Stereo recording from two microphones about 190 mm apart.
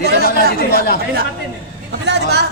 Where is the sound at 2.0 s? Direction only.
60° right (ahead or behind).